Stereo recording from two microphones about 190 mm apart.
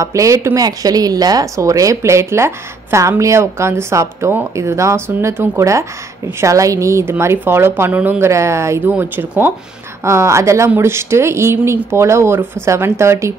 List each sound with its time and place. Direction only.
0.0 s a woman's voice: 15° right (ahead or behind)